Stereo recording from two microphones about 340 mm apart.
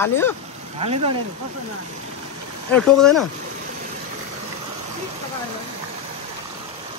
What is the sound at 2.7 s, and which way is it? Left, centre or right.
Speech, centre.